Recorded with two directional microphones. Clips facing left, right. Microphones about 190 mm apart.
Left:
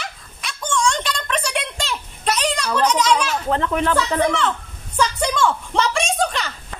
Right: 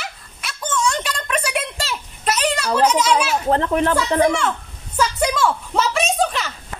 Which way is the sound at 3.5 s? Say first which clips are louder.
Right 3 dB; 40° right (ahead or behind).